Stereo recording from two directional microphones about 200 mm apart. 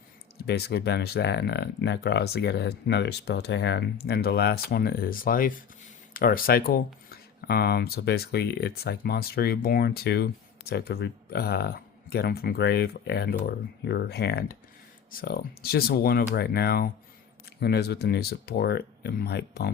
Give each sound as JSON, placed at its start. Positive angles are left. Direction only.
{"t": 0.4, "sound": "speech", "side_deg": 55}